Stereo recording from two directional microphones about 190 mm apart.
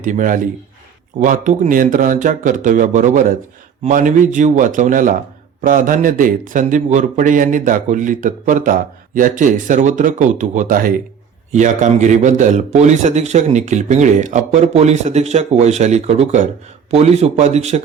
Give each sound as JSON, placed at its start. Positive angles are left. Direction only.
{"t": 0.0, "sound": "a man's voice", "side_deg": -45}